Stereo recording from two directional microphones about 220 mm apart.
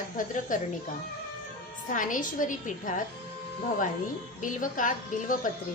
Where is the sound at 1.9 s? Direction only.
35° left (ahead or behind).